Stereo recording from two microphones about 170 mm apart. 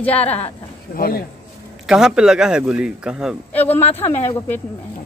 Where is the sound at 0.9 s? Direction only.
60° left (ahead or behind).